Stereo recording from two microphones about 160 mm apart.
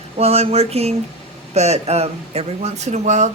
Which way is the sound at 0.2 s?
40° right (ahead or behind).